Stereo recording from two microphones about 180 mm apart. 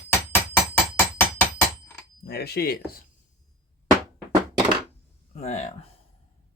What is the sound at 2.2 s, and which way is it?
Speech, 60° left (ahead or behind).